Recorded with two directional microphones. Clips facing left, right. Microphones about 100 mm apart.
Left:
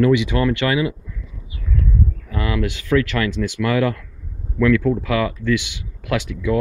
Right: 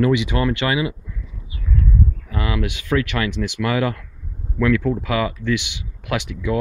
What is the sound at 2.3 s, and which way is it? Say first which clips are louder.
Speech: left 2 dB; 10° right (ahead or behind).